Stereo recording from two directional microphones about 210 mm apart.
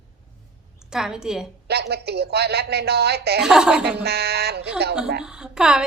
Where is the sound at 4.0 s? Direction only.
50° right (ahead or behind).